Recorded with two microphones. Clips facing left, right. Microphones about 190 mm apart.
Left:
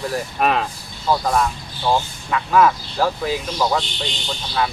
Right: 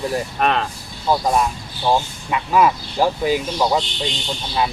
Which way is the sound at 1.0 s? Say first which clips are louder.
Right 1 dB; 15° right (ahead or behind).